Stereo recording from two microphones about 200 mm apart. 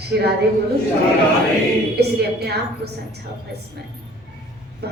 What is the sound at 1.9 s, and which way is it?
A woman's voice, 55° right (ahead or behind).